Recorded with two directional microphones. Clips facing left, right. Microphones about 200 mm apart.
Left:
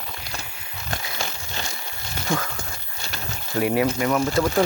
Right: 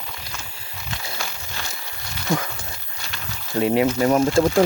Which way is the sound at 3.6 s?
25° right (ahead or behind).